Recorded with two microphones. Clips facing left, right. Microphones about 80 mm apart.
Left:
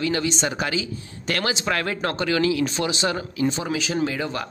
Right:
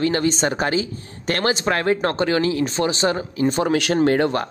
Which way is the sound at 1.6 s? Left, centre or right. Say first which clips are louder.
Right 5 dB; right.